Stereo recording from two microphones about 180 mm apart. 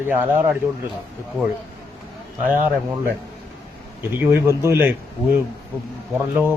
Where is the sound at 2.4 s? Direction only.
10° right (ahead or behind).